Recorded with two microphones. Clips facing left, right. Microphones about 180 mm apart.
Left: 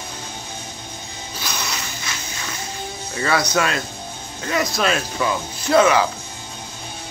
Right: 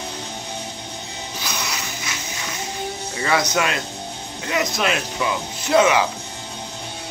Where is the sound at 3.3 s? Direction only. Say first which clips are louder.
Left 1 dB; 15° right (ahead or behind).